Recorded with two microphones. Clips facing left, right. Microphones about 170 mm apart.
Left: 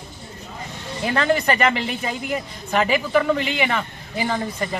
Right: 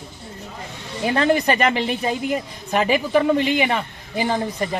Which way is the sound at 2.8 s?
25° right (ahead or behind).